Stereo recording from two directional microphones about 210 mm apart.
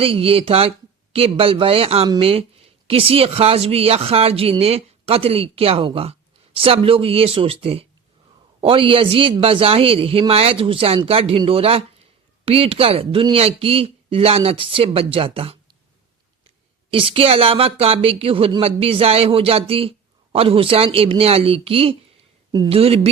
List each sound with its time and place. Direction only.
0.0 s speech: 25° right (ahead or behind)
16.9 s speech: 25° right (ahead or behind)